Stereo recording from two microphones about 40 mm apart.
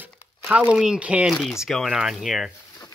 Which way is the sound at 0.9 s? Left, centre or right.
Right.